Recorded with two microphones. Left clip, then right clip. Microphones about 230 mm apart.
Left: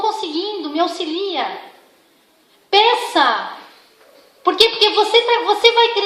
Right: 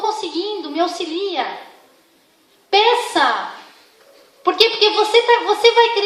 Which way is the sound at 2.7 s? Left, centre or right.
Left.